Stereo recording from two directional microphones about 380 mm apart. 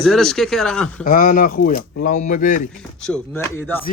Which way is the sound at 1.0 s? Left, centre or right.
Left.